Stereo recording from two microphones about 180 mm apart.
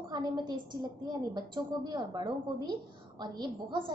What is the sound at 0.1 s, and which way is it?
A woman's voice, 25° right (ahead or behind).